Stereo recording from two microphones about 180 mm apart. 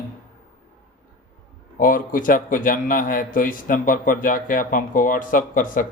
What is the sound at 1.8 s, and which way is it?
A man's voice, 50° left (ahead or behind).